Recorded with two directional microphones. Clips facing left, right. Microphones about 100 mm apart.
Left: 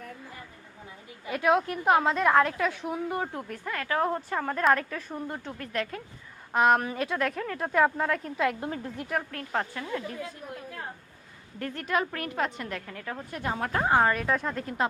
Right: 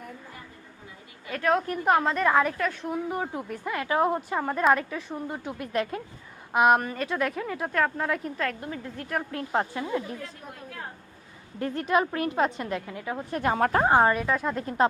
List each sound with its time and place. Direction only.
1.3 s a woman's voice: 5° left (ahead or behind); by 6.0 s 20° right (ahead or behind)
6.5 s a woman's voice: 10° right (ahead or behind)
6.8 s a woman's voice: 5° left (ahead or behind)
7.7 s speech: 5° left (ahead or behind)
8.0 s a woman's voice: 5° right (ahead or behind)
8.6 s a woman's voice: 25° left (ahead or behind)
9.3 s a woman's voice: 25° right (ahead or behind)
11.6 s a woman's voice: 20° right (ahead or behind)
13.4 s a woman's voice: 65° right (ahead or behind)
13.7 s speech: 35° right (ahead or behind)
14.0 s a woman's voice: 10° right (ahead or behind)
14.5 s speech: 30° right (ahead or behind)